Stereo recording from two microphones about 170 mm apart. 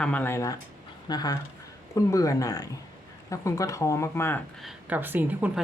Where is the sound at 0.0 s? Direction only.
10° left (ahead or behind).